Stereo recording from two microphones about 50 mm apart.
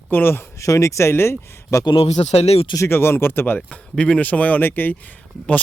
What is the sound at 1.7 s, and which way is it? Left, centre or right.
Speech, left.